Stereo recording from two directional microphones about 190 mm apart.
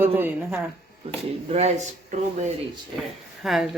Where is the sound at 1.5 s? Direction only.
35° right (ahead or behind).